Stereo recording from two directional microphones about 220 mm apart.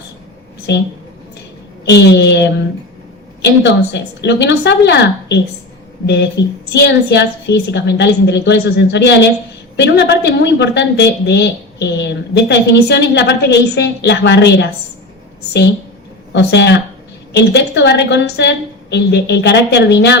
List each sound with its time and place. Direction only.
0.7 s speech: 50° left (ahead or behind)
16.3 s speech: 50° left (ahead or behind)